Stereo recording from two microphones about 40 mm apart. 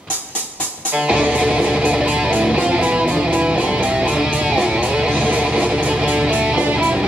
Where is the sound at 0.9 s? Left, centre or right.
Right.